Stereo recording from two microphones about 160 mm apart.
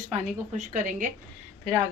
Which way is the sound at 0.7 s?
50° right (ahead or behind).